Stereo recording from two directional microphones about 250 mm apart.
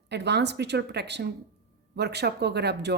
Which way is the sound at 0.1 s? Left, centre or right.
Right.